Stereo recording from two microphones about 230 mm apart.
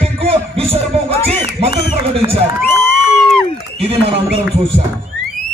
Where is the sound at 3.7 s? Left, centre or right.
Right.